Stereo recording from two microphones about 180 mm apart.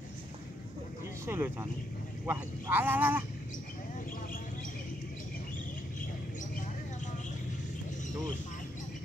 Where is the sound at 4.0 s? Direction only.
50° left (ahead or behind).